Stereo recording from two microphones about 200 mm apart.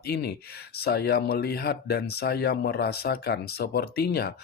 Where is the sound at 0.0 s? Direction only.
55° left (ahead or behind).